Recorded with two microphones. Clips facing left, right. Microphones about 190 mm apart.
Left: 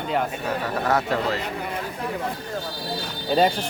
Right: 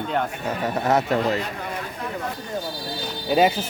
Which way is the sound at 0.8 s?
20° right (ahead or behind).